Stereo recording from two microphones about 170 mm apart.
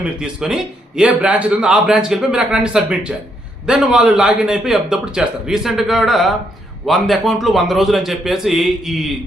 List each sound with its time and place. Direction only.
0.0 s a man's voice: 5° right (ahead or behind)